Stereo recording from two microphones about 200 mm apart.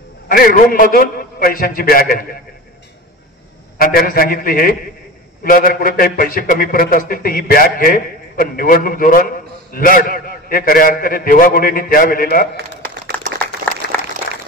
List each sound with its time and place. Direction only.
0.3 s a man's voice: 45° left (ahead or behind)
3.7 s a man's voice: 45° left (ahead or behind)
13.9 s applause: 10° left (ahead or behind)